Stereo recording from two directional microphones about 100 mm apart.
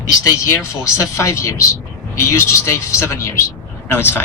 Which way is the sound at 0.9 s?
30° left (ahead or behind).